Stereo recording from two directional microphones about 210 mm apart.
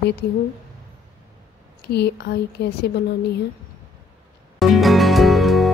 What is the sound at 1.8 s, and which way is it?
Speech, 50° left (ahead or behind).